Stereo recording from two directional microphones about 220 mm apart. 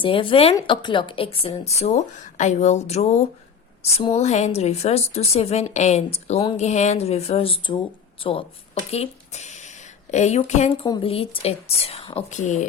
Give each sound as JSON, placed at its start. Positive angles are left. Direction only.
{"t": 0.0, "sound": "a woman's voice", "side_deg": 25}